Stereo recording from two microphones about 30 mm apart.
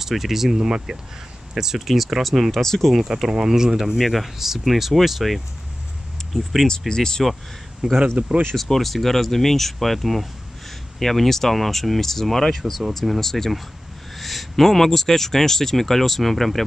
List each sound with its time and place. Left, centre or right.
0.0 s speech: centre
0.6 s speech: right; by 2.5 s centre
2.5 s speech: centre
3.3 s speech: right
4.0 s speech: centre
4.4 s speech: centre
6.9 s speech: left
8.0 s speech: right
8.5 s speech: centre
11.0 s speech: centre